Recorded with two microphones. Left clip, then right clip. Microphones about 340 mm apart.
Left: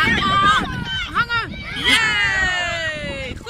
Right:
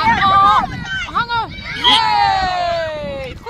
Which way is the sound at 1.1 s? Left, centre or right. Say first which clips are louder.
Right 2 dB; centre.